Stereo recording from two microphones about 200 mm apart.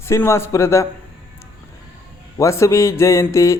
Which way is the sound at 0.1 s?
10° left (ahead or behind).